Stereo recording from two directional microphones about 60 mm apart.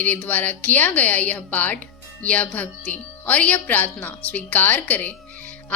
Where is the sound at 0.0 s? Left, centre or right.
Left.